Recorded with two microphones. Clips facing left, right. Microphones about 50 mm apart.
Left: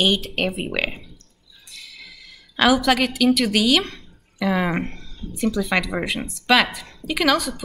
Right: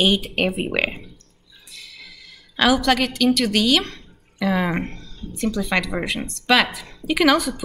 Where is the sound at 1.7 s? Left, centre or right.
Centre.